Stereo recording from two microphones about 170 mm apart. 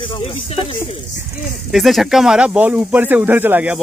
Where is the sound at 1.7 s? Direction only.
Centre (ahead or behind).